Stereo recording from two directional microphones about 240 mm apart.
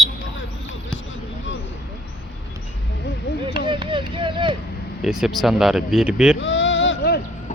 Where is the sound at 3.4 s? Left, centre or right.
Centre.